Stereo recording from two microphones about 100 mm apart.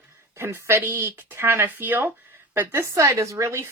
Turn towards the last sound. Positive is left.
turn(degrees=-30)  # may be behind; listen again after turning